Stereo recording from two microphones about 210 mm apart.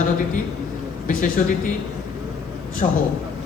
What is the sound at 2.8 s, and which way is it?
Speech, 35° left (ahead or behind).